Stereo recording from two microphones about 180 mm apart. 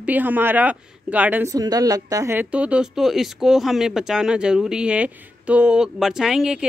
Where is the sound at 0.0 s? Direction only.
10° right (ahead or behind).